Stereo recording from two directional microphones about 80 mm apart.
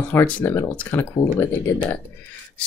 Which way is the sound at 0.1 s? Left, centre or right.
Left.